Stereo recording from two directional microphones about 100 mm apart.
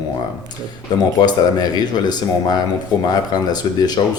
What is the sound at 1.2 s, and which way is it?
Speech, 45° left (ahead or behind).